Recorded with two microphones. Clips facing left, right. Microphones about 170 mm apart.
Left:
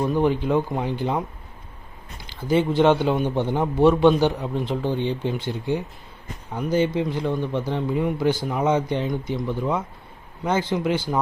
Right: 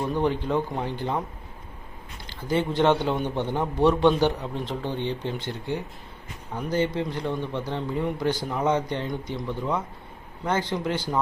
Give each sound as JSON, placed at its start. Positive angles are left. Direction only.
{"t": 0.1, "sound": "a man's voice", "side_deg": 10}
{"t": 2.5, "sound": "a man's voice", "side_deg": 10}